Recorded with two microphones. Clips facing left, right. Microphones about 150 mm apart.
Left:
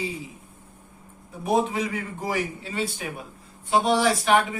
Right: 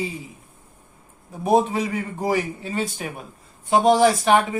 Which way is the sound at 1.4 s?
40° right (ahead or behind).